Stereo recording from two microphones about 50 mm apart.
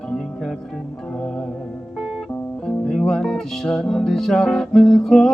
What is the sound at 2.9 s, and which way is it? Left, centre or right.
Music, centre.